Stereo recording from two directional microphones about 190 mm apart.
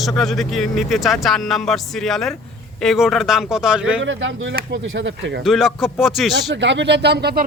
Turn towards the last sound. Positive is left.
turn(degrees=-60)  # may be behind; listen again after turning